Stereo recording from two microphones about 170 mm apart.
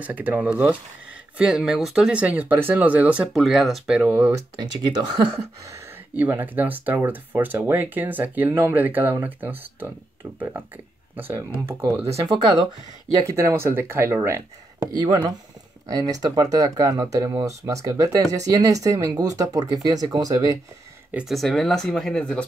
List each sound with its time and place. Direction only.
0.0 s speech: 10° right (ahead or behind)
5.1 s speech: 25° right (ahead or behind)
6.1 s speech: 10° right (ahead or behind)
11.1 s speech: 10° right (ahead or behind)
11.6 s speech: 25° right (ahead or behind)
21.1 s speech: 5° right (ahead or behind)